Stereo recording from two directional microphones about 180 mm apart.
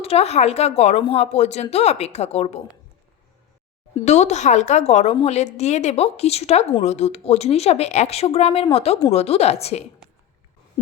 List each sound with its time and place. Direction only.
0.0 s speech: 35° left (ahead or behind)
4.0 s speech: 40° left (ahead or behind)